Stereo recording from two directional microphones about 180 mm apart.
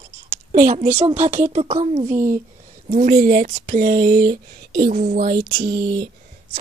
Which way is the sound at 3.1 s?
55° right (ahead or behind).